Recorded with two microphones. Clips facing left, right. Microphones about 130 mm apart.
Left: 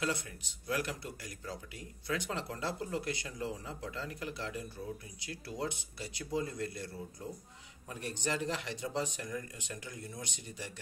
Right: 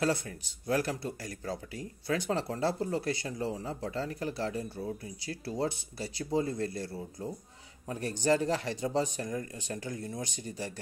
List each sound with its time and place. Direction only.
0.0 s speech: 35° right (ahead or behind)